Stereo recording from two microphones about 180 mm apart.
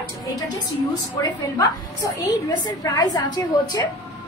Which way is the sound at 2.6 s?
20° left (ahead or behind).